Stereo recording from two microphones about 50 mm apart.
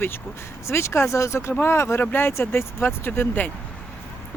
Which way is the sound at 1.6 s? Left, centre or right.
Left.